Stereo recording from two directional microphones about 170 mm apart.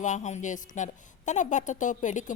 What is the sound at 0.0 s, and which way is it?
A woman's voice, 45° left (ahead or behind).